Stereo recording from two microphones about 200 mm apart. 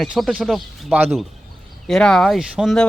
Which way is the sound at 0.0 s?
Centre (ahead or behind).